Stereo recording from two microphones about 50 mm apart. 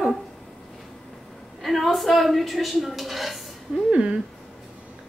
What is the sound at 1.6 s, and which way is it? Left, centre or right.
A woman's voice, centre.